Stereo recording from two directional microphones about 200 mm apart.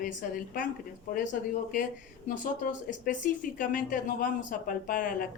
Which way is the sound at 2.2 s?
40° left (ahead or behind).